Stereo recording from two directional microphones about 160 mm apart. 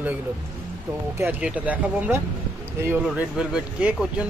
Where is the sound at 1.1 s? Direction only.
10° right (ahead or behind).